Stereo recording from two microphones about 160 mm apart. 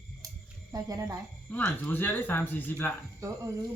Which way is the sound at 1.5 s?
10° left (ahead or behind).